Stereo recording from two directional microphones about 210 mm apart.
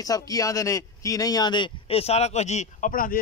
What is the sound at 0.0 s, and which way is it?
Speech, 15° left (ahead or behind).